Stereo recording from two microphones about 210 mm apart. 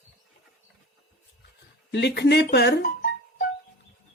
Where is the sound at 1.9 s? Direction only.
55° left (ahead or behind).